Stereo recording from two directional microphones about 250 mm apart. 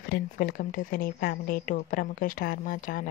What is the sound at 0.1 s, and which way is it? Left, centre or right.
Speech, left.